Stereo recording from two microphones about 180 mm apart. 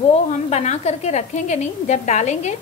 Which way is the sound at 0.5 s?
40° left (ahead or behind).